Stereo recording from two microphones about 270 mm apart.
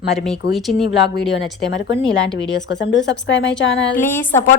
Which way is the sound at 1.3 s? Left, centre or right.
Left.